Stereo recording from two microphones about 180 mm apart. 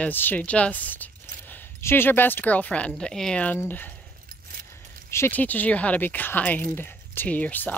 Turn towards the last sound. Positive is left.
turn(degrees=10)  # may be behind; listen again after turning